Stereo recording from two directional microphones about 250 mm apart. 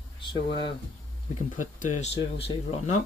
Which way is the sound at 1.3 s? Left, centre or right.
Left.